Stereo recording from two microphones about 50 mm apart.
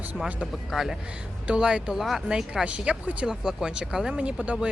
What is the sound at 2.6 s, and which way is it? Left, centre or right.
Speech, right.